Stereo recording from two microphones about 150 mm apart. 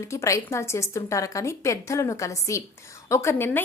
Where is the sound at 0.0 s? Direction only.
20° left (ahead or behind).